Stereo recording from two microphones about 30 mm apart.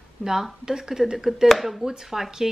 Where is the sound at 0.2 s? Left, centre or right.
Centre.